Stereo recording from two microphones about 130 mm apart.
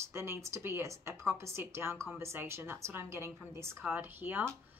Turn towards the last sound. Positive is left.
turn(degrees=-15)  # may be behind; listen again after turning